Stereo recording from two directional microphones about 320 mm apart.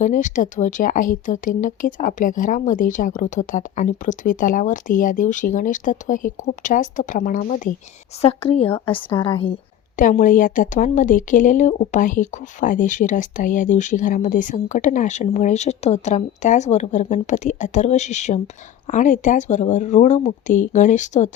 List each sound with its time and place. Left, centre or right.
0.0 s a woman's voice: left